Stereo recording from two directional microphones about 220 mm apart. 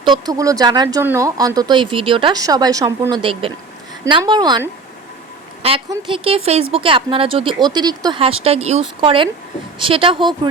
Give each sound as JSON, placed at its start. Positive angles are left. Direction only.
{"t": 0.0, "sound": "speech", "side_deg": -20}